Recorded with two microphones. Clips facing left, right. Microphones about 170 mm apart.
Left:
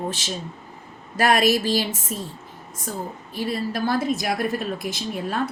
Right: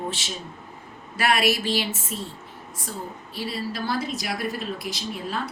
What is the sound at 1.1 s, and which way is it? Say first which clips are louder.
Speech: left 4 dB; 40° left (ahead or behind).